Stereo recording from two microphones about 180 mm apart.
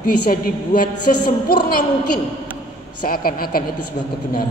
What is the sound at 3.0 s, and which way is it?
Speech, 55° left (ahead or behind).